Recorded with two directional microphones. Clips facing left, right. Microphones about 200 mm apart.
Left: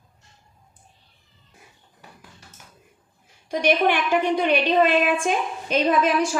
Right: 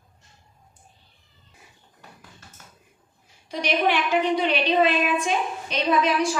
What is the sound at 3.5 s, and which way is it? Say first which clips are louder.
Speech: left 3 dB; 50° left (ahead or behind).